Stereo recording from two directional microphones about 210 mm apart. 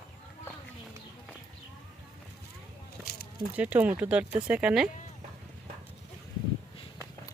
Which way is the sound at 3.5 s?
5° right (ahead or behind).